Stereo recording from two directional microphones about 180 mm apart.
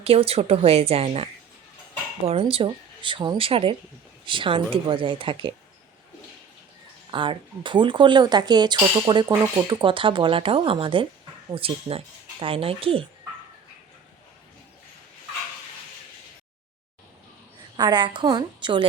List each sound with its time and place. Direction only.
0.0 s speech: 35° right (ahead or behind)
7.1 s speech: 25° right (ahead or behind)
17.7 s speech: 25° right (ahead or behind)